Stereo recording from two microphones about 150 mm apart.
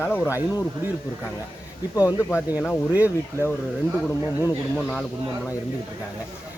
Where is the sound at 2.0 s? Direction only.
20° left (ahead or behind).